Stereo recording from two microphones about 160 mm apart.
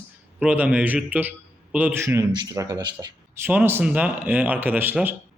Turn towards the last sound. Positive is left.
turn(degrees=-10)  # may be behind; listen again after turning